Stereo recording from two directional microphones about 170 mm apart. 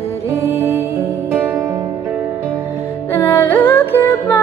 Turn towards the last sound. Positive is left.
turn(degrees=10)  # may be behind; listen again after turning